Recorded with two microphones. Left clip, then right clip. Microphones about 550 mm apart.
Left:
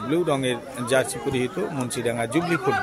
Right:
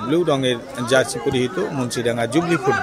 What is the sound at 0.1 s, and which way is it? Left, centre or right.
A man's voice, left.